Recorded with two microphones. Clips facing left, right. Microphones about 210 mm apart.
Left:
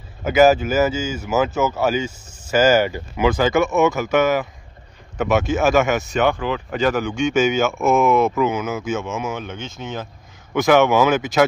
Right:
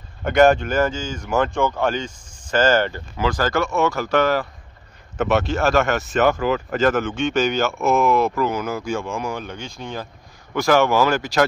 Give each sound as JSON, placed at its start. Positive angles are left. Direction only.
{"t": 0.2, "sound": "speech", "side_deg": 5}
{"t": 3.7, "sound": "speech", "side_deg": 20}
{"t": 5.1, "sound": "speech", "side_deg": 0}
{"t": 9.7, "sound": "speech", "side_deg": 20}
{"t": 10.9, "sound": "speech", "side_deg": 0}